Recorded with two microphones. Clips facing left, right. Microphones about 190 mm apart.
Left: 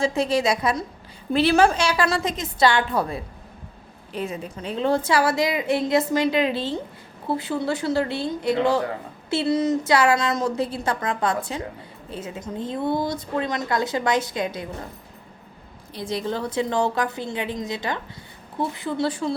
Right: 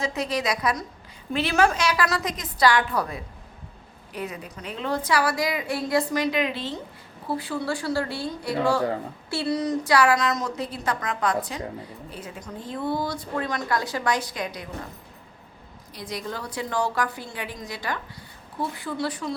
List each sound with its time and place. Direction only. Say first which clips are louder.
0.0 s a woman's voice: left 5 dB; 30° left (ahead or behind)
16.0 s a woman's voice: left 6 dB; 25° left (ahead or behind)